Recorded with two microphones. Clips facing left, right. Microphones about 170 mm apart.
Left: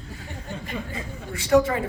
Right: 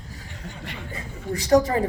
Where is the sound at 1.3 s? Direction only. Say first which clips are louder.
Right 1 dB; 40° right (ahead or behind).